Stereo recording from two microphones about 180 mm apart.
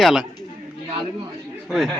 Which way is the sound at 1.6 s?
Centre (ahead or behind).